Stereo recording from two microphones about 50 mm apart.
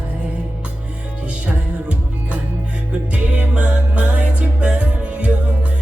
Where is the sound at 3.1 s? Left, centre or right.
Right.